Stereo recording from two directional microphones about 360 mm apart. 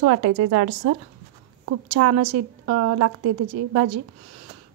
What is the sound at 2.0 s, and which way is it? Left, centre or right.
A woman's voice, right.